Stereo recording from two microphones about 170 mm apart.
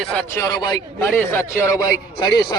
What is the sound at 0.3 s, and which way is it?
A man's voice, 20° left (ahead or behind).